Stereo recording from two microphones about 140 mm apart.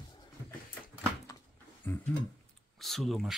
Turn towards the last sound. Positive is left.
turn(degrees=0)  # may be behind; listen again after turning